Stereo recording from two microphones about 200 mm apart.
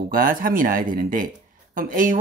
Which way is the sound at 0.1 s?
45° right (ahead or behind).